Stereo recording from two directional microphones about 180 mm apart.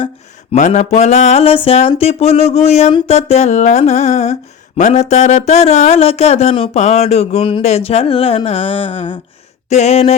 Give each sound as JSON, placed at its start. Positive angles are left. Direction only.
{"t": 0.5, "sound": "speech", "side_deg": 40}